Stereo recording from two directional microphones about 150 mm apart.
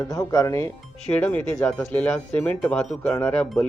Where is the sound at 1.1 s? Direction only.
10° left (ahead or behind).